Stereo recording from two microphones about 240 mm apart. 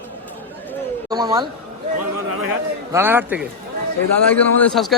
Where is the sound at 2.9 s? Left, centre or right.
Centre.